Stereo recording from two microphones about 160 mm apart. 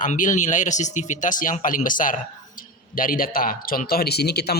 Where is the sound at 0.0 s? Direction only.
55° left (ahead or behind).